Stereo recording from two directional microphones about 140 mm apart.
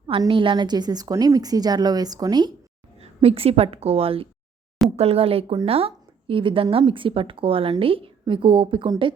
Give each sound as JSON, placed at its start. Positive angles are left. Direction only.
{"t": 0.2, "sound": "a woman's voice", "side_deg": -35}
{"t": 3.0, "sound": "a woman's voice", "side_deg": -45}